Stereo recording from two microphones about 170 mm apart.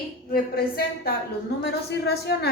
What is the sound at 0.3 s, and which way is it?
A woman's voice, 65° left (ahead or behind).